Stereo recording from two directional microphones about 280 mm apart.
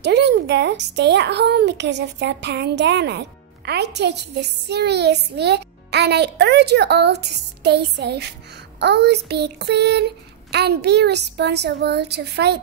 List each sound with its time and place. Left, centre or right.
0.0 s a woman's voice: right